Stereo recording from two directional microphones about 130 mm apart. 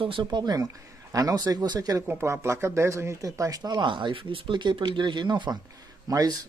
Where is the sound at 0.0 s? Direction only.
40° right (ahead or behind).